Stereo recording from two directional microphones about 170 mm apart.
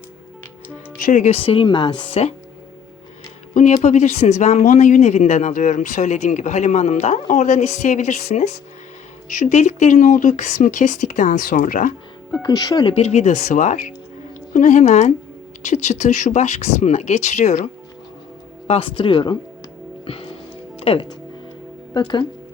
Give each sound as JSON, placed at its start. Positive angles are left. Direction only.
{"t": 0.9, "sound": "speech", "side_deg": 50}
{"t": 3.5, "sound": "speech", "side_deg": 45}
{"t": 12.4, "sound": "speech", "side_deg": 25}
{"t": 18.7, "sound": "speech", "side_deg": 30}
{"t": 20.7, "sound": "speech", "side_deg": 35}